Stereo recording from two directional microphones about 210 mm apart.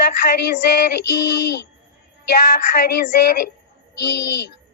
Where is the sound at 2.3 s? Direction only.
45° left (ahead or behind).